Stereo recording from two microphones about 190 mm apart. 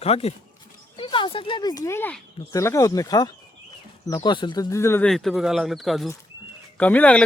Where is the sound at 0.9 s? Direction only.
25° left (ahead or behind).